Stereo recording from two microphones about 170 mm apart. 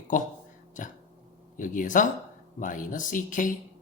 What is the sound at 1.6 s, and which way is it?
Speech, 50° left (ahead or behind).